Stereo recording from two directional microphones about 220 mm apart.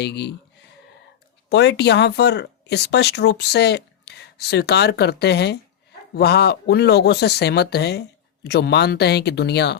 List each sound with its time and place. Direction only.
0.0 s speech: 50° left (ahead or behind)
1.5 s speech: 50° left (ahead or behind)